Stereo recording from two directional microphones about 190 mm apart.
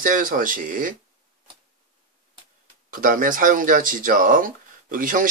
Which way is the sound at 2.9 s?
45° right (ahead or behind).